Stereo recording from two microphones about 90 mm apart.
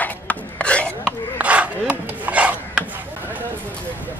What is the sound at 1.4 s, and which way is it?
Rub, 15° right (ahead or behind).